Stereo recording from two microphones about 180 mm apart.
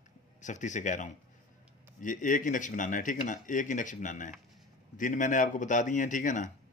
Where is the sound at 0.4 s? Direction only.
45° left (ahead or behind).